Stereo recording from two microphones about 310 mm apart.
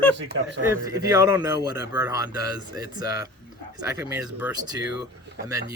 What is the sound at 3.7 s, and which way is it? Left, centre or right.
Speech, centre.